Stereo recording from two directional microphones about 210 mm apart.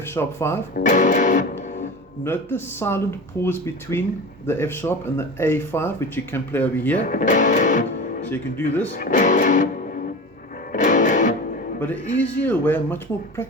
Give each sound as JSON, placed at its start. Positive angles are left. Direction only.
{"t": 0.1, "sound": "speech", "side_deg": 10}
{"t": 0.8, "sound": "music", "side_deg": 35}
{"t": 2.2, "sound": "speech", "side_deg": 10}
{"t": 7.0, "sound": "music", "side_deg": 40}
{"t": 8.3, "sound": "speech", "side_deg": 10}
{"t": 9.0, "sound": "music", "side_deg": 40}
{"t": 11.8, "sound": "speech", "side_deg": 10}